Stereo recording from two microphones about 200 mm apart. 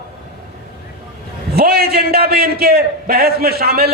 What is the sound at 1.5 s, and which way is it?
A man's voice, 50° right (ahead or behind).